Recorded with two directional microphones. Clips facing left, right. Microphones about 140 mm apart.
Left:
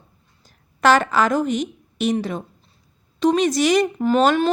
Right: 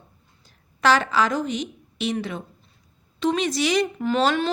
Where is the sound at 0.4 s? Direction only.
50° left (ahead or behind).